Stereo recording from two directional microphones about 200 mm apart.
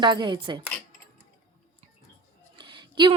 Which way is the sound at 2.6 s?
25° right (ahead or behind).